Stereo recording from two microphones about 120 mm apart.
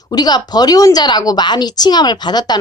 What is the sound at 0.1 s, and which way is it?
A woman's voice, 35° left (ahead or behind).